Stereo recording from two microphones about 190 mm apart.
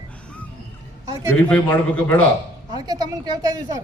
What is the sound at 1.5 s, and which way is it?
Speech, 5° left (ahead or behind).